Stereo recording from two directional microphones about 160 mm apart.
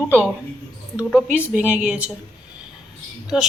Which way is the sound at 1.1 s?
10° right (ahead or behind).